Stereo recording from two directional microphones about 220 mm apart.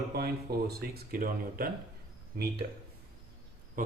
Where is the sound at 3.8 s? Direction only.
35° right (ahead or behind).